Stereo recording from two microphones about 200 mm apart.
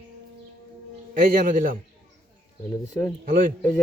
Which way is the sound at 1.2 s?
45° right (ahead or behind).